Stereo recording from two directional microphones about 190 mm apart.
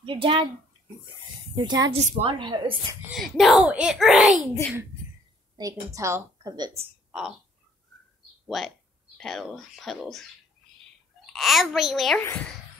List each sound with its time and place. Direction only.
0.0 s a child's voice: 25° right (ahead or behind)
1.5 s speech: 20° right (ahead or behind)
3.0 s a child's voice: centre (ahead or behind)
5.6 s a woman's voice: 20° right (ahead or behind)
7.1 s a sound: centre (ahead or behind)
8.5 s a child's voice: centre (ahead or behind)
11.3 s a child's voice: centre (ahead or behind)